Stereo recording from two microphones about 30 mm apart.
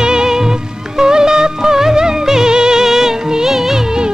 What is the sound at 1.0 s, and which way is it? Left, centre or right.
Music, right.